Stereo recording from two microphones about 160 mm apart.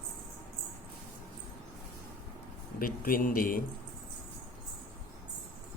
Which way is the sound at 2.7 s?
65° left (ahead or behind).